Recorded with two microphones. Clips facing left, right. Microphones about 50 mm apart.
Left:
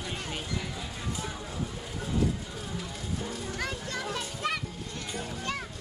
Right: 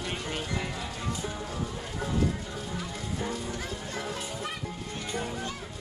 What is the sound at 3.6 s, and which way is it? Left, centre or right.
Children playing, left.